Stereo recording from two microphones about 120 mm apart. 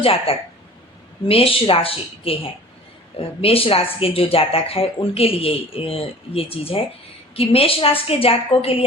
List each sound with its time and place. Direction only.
0.0 s speech: 50° left (ahead or behind)